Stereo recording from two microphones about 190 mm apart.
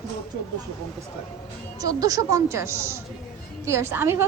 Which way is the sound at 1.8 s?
20° right (ahead or behind).